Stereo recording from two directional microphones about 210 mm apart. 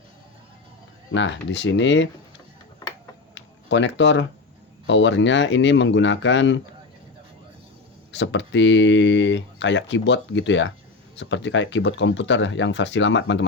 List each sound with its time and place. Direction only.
1.1 s speech: 60° left (ahead or behind)
3.3 s a sound: 60° left (ahead or behind)
4.9 s speech: 60° left (ahead or behind)
8.1 s speech: 55° left (ahead or behind)